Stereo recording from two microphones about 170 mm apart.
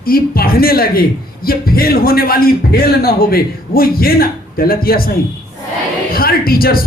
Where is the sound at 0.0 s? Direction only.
60° left (ahead or behind).